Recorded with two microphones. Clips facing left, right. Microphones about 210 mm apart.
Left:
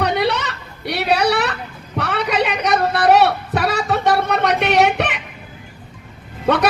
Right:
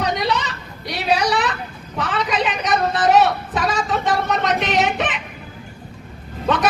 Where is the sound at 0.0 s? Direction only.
65° left (ahead or behind).